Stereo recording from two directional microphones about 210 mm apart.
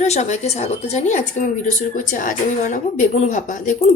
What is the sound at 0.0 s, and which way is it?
A woman's voice, 35° left (ahead or behind).